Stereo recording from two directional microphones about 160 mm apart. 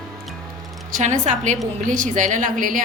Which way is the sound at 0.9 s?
50° right (ahead or behind).